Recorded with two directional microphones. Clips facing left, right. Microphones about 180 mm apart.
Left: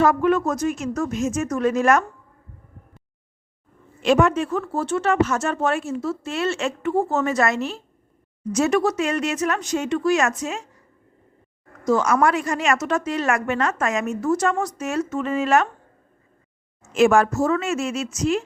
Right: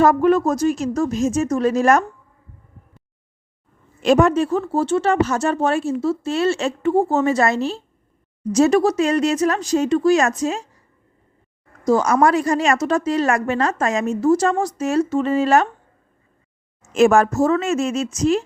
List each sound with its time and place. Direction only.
0.0 s a woman's voice: 40° right (ahead or behind)
4.0 s a woman's voice: 40° right (ahead or behind)
11.9 s a woman's voice: 35° right (ahead or behind)
16.9 s a woman's voice: 40° right (ahead or behind)